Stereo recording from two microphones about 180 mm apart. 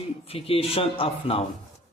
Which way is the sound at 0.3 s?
30° left (ahead or behind).